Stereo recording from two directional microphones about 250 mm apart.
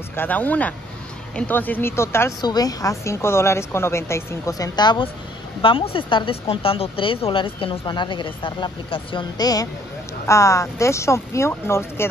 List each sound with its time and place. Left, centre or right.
0.1 s speech: centre